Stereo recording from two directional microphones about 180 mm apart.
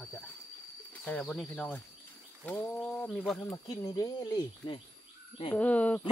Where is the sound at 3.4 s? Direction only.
20° left (ahead or behind).